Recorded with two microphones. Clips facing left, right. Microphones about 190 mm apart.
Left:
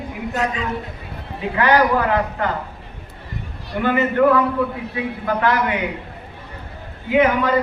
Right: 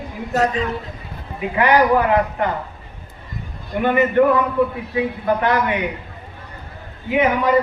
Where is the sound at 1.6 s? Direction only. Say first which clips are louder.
Right 1 dB; 20° right (ahead or behind).